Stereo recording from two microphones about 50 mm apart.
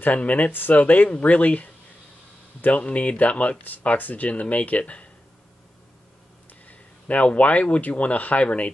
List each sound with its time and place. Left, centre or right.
0.0 s speech: left
0.5 s speech: left
0.7 s speech: left
6.7 s speech: left